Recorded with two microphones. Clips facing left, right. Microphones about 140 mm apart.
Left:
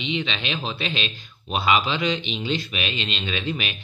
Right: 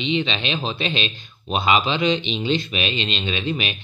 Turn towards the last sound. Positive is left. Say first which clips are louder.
# right 3 dB
turn(degrees=-20)  # may be behind; listen again after turning